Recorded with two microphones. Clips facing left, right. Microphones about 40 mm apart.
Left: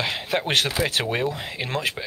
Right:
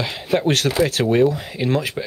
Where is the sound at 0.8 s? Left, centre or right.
Left; by 2.1 s centre.